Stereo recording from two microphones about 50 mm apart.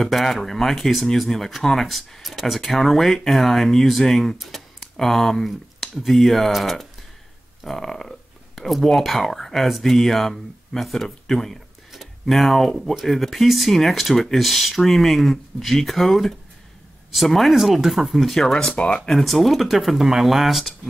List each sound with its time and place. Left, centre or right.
0.0 s speech: centre
18.3 s speech: centre
19.0 s speech: centre